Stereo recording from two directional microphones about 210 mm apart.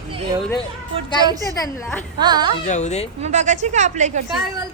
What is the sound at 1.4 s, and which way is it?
Speech, 15° left (ahead or behind).